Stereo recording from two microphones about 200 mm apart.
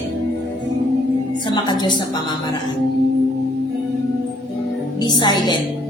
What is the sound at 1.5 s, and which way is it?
Speech, 20° left (ahead or behind).